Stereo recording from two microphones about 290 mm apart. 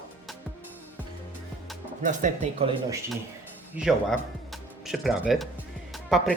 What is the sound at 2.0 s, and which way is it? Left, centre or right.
Speech, right.